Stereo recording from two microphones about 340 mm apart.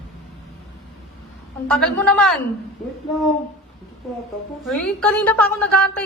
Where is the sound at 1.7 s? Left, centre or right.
Centre.